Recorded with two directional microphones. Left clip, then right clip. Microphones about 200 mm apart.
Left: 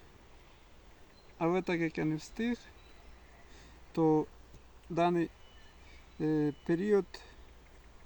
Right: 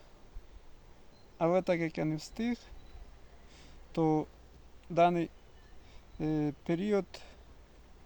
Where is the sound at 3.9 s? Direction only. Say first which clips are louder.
Left 2 dB; 20° right (ahead or behind).